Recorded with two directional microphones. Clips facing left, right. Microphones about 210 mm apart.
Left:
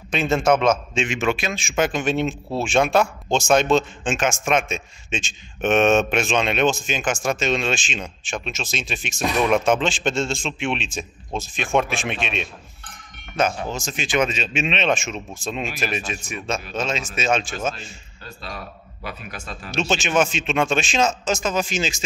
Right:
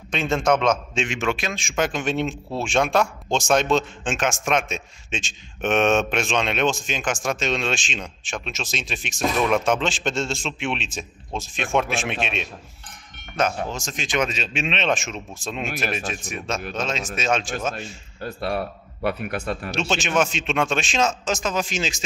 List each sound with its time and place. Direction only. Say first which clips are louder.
0.1 s a man's voice: left 2 dB; 5° left (ahead or behind)
18.2 s a man's voice: right 10 dB; 60° right (ahead or behind)
19.7 s a man's voice: left 3 dB; centre (ahead or behind)